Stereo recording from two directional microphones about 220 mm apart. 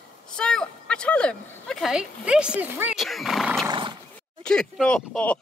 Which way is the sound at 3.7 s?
20° right (ahead or behind).